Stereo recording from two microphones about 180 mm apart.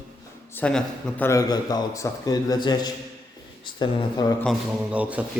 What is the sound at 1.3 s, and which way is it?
A man's voice, 20° left (ahead or behind).